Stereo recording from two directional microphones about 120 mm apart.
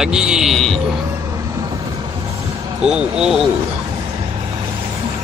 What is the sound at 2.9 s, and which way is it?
Speech, 5° right (ahead or behind).